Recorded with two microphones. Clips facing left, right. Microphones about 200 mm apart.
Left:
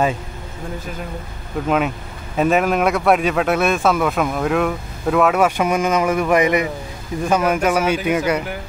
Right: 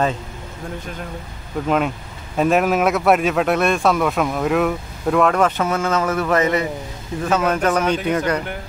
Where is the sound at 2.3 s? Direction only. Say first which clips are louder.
Even; centre (ahead or behind).